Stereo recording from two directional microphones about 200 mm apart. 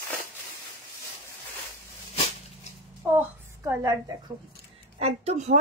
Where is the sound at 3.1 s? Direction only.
15° right (ahead or behind).